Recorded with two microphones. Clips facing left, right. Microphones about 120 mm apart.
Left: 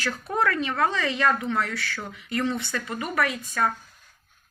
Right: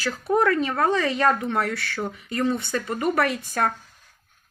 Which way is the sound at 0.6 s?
35° right (ahead or behind).